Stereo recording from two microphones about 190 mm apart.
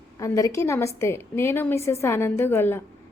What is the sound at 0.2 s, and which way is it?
A woman's voice, 15° left (ahead or behind).